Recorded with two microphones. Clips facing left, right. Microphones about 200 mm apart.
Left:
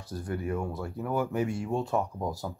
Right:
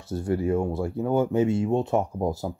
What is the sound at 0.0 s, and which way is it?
Speech, 25° right (ahead or behind).